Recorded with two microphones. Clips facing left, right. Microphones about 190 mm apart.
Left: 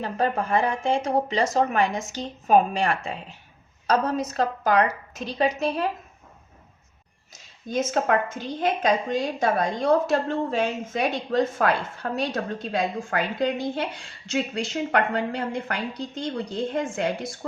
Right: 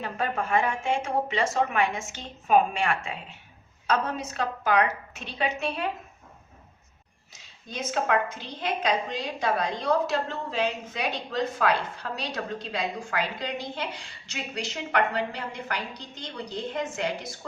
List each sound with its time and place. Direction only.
0.0 s speech: 35° left (ahead or behind)
7.7 s a woman's voice: 45° left (ahead or behind)